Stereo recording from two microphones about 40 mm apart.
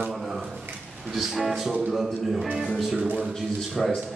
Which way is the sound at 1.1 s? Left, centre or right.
Centre.